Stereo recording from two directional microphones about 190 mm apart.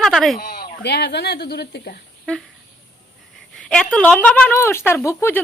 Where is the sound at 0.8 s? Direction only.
60° left (ahead or behind).